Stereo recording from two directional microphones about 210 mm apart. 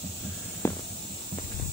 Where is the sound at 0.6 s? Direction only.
10° left (ahead or behind).